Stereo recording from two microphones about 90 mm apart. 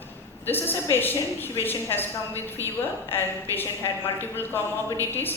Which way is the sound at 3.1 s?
25° left (ahead or behind).